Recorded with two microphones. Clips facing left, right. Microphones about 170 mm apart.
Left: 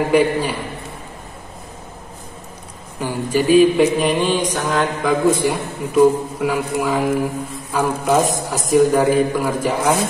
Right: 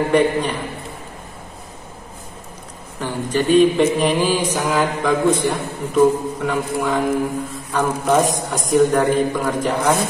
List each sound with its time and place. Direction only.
0.1 s a man's voice: 5° left (ahead or behind)
3.0 s mantra: 10° left (ahead or behind)